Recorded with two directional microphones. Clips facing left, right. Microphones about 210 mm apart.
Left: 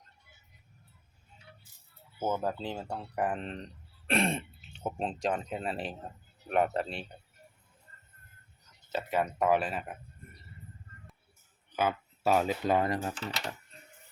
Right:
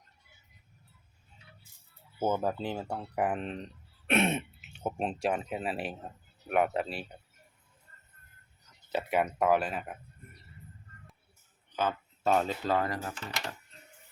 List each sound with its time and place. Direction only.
2.2 s speech: 10° right (ahead or behind)
8.9 s speech: 15° right (ahead or behind)
11.7 s speech: 10° left (ahead or behind); by 13.6 s 25° left (ahead or behind)